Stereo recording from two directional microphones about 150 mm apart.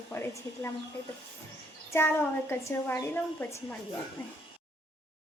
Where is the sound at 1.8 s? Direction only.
15° left (ahead or behind).